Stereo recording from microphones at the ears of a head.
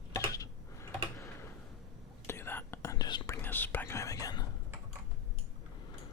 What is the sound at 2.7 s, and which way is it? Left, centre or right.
Whispering, left.